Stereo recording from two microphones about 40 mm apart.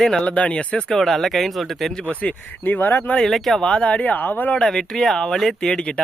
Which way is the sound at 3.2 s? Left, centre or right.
Centre.